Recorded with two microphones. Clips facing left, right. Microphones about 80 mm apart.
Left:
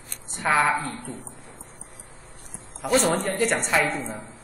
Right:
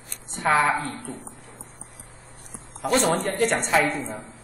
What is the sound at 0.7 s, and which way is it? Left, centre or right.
Speech, centre.